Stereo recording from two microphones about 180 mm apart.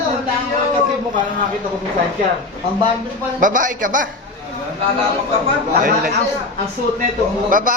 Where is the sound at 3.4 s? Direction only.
45° right (ahead or behind).